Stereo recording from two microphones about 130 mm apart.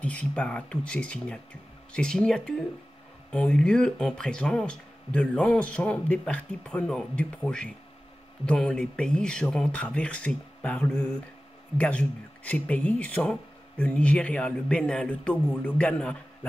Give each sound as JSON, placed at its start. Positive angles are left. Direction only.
{"t": 0.0, "sound": "speech", "side_deg": 10}